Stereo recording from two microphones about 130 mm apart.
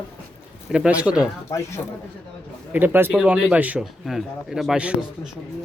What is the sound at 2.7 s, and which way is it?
Speech, 15° right (ahead or behind).